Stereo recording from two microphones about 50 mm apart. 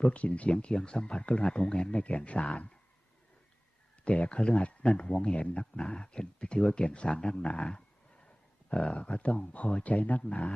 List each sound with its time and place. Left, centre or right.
0.0 s speech: left
4.0 s speech: left